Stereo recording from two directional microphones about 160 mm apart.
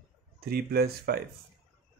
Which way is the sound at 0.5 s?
75° right (ahead or behind).